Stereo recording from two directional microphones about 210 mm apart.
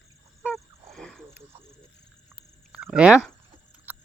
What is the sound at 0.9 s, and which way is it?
Wild animals, centre (ahead or behind).